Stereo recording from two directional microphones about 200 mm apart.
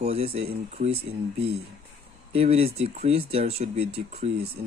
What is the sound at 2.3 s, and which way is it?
Speech, 30° right (ahead or behind).